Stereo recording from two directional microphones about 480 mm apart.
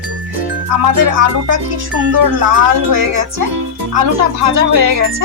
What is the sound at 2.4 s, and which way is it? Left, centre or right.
Speech, right.